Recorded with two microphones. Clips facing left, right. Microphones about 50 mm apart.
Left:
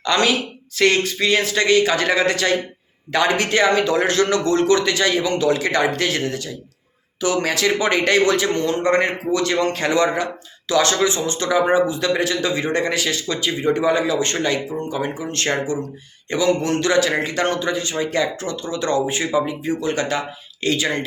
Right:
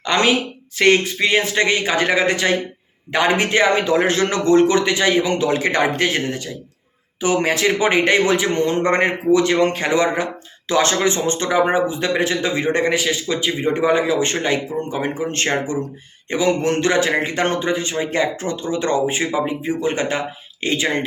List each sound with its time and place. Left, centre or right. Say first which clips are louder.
0.0 s a woman's voice: right 1 dB; right